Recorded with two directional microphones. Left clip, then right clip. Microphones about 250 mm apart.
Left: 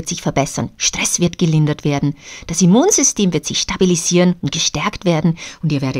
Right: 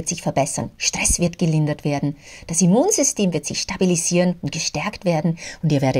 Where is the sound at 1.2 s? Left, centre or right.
Left.